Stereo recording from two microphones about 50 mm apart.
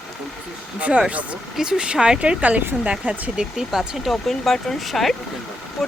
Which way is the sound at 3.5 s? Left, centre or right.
Centre.